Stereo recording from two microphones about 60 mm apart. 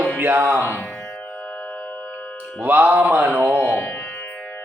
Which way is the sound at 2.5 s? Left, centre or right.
Right.